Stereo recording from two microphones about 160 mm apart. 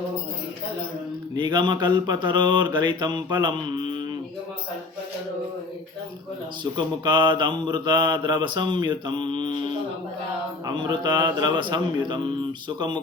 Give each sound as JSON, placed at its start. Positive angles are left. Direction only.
{"t": 1.4, "sound": "mantra", "side_deg": -25}
{"t": 6.7, "sound": "mantra", "side_deg": -30}